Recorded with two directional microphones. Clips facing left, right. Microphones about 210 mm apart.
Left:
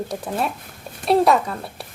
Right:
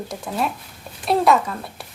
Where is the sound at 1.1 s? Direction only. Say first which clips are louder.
Left 1 dB; 35° left (ahead or behind).